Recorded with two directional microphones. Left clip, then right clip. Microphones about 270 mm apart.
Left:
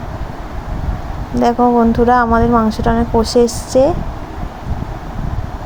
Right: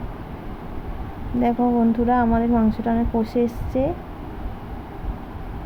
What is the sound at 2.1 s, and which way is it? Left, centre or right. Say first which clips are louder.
A woman's voice: left 8 dB; centre.